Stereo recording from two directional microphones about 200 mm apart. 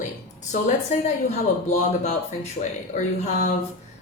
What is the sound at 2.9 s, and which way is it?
Speech, 40° left (ahead or behind).